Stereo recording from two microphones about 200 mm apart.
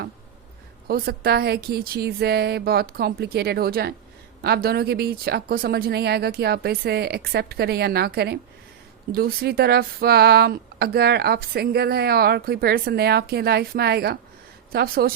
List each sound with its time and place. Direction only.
0.9 s speech: 50° right (ahead or behind)